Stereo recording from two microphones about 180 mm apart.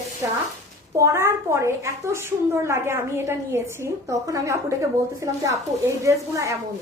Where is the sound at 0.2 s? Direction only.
15° right (ahead or behind).